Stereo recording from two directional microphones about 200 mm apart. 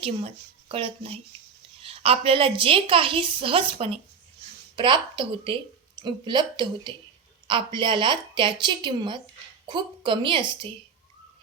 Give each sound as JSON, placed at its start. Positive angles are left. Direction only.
{"t": 0.0, "sound": "a woman's voice", "side_deg": -30}